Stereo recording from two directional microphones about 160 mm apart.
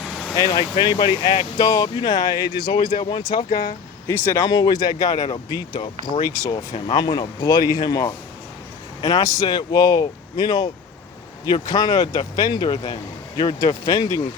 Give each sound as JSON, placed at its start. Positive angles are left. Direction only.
{"t": 0.0, "sound": "vehicle", "side_deg": 0}
{"t": 0.3, "sound": "speech", "side_deg": 25}
{"t": 2.7, "sound": "speech", "side_deg": 35}
{"t": 4.4, "sound": "speech", "side_deg": 25}